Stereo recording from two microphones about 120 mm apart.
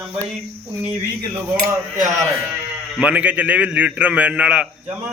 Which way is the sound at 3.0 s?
10° right (ahead or behind).